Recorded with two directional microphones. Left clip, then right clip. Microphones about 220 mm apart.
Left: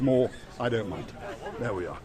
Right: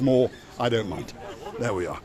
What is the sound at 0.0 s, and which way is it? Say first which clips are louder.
Speech: right 3 dB; 45° right (ahead or behind).